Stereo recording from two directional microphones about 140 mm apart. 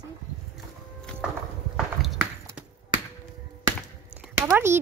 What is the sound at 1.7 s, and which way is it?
Walk, centre (ahead or behind).